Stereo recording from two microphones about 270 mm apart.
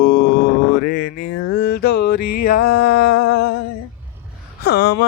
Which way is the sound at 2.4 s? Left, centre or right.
Left.